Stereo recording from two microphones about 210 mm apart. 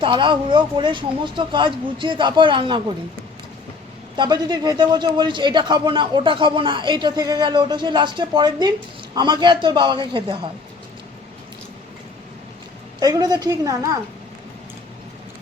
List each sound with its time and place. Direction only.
0.0 s a man's voice: 20° right (ahead or behind)
4.2 s a man's voice: 20° right (ahead or behind)
13.0 s a woman's voice: 15° right (ahead or behind)